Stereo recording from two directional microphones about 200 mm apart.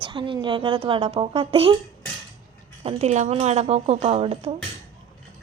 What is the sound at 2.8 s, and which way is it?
A woman's voice, 35° right (ahead or behind).